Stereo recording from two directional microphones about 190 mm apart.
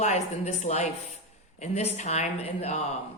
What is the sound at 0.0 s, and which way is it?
A woman's voice, 40° left (ahead or behind).